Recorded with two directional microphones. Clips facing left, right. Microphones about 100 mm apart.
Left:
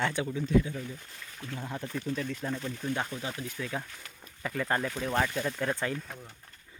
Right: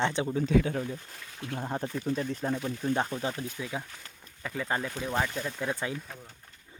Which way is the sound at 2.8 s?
30° right (ahead or behind).